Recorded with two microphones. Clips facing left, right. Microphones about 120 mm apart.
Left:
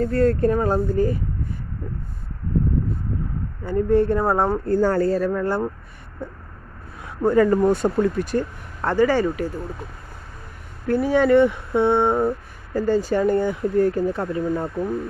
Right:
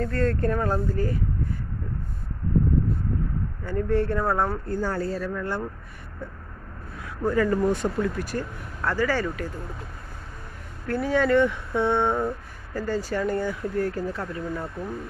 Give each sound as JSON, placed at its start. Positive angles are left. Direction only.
{"t": 0.0, "sound": "speech", "side_deg": 10}
{"t": 3.6, "sound": "speech", "side_deg": 15}
{"t": 4.6, "sound": "speech", "side_deg": 55}
{"t": 7.2, "sound": "speech", "side_deg": 30}
{"t": 10.9, "sound": "speech", "side_deg": 15}